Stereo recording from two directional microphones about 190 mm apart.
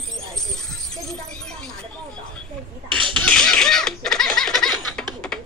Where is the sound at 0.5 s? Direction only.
Centre (ahead or behind).